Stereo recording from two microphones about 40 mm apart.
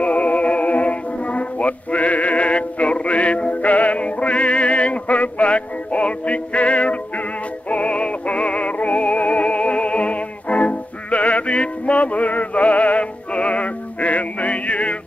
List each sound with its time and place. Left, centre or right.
0.0 s music: left